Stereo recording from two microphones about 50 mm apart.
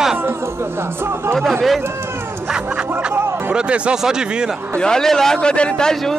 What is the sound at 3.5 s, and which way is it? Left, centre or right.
Speech, right.